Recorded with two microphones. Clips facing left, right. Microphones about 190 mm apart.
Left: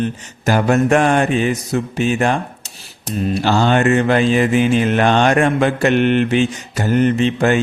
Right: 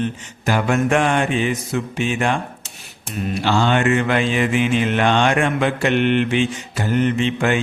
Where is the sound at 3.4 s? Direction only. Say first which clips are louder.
Left 2 dB; 40° left (ahead or behind).